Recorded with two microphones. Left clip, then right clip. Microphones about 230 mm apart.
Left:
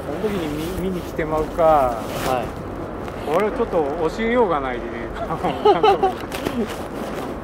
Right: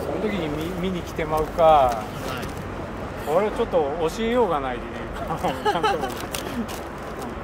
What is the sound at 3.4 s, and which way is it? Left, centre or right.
Speech, right.